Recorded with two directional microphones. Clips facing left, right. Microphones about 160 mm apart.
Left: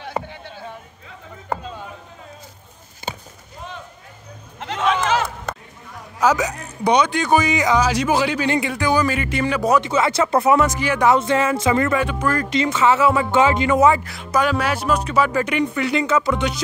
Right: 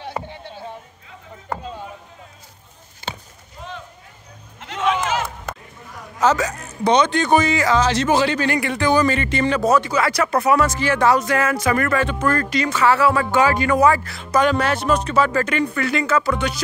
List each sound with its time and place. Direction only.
6.1 s speech: 15° left (ahead or behind)
8.5 s speech: 20° left (ahead or behind)
8.7 s speech: 10° left (ahead or behind)
11.1 s speech: 25° left (ahead or behind)